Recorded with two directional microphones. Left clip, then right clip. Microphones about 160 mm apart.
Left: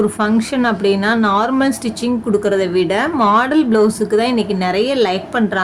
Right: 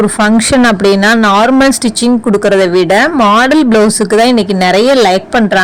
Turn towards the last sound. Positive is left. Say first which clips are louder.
# right 9 dB
turn(degrees=-55)  # may be behind; listen again after turning